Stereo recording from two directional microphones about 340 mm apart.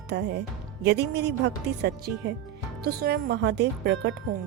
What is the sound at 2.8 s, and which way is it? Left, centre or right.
Speech, right.